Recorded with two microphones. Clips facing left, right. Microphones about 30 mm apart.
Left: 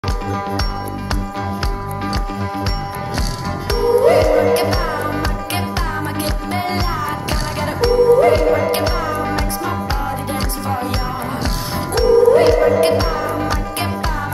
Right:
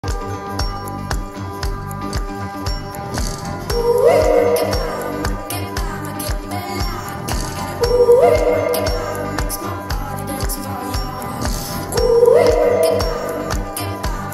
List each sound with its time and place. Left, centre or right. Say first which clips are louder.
3.6 s music: even; left